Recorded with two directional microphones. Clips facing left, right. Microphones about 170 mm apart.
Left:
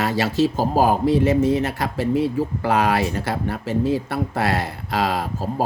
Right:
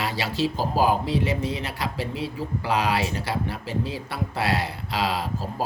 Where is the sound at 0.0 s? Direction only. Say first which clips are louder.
Left 6 dB; 45° left (ahead or behind).